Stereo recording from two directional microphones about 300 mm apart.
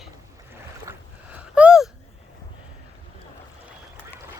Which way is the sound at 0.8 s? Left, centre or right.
Centre.